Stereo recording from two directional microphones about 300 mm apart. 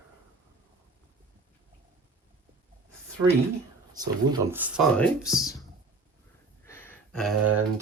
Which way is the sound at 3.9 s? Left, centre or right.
Centre.